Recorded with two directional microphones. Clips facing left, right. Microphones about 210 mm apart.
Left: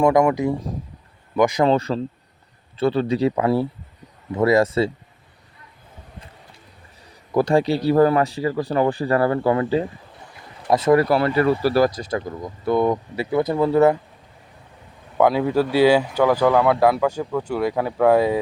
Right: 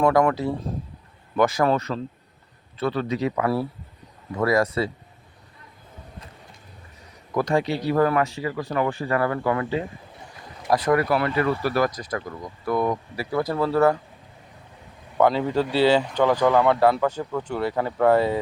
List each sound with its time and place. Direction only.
0.0 s speech: 10° left (ahead or behind)
1.7 s speech: 30° left (ahead or behind)
7.3 s speech: 30° left (ahead or behind)
11.0 s speech: 35° left (ahead or behind); by 14.0 s 20° left (ahead or behind)
15.2 s speech: 10° left (ahead or behind)